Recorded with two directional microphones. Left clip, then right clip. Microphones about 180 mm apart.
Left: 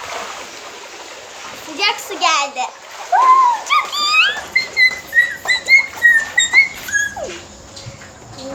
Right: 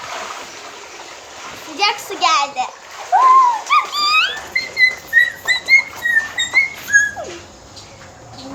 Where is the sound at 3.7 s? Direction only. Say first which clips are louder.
Even; 10° right (ahead or behind).